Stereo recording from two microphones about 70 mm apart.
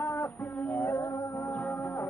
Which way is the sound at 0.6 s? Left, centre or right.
Left.